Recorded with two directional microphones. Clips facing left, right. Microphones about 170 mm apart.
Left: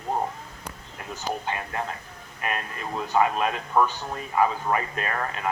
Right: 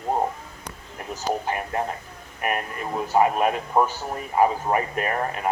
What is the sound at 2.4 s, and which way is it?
A man's voice, 20° right (ahead or behind).